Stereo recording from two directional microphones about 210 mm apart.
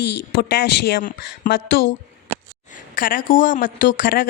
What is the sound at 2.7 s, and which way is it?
A woman's voice, 40° left (ahead or behind).